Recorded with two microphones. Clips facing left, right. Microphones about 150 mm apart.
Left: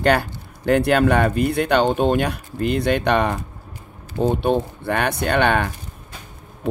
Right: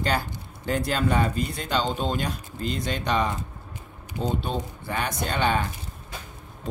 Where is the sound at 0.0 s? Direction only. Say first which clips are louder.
Left 8 dB; 65° left (ahead or behind).